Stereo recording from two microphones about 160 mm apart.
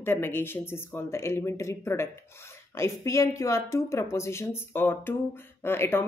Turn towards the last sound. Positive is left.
turn(degrees=15)  # may be behind; listen again after turning